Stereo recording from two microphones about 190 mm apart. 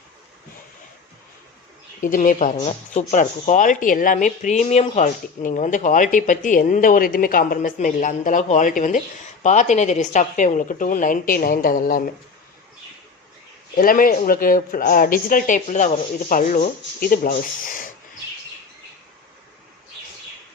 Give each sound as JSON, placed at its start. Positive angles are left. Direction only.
{"t": 2.0, "sound": "speech", "side_deg": 45}
{"t": 13.7, "sound": "speech", "side_deg": 50}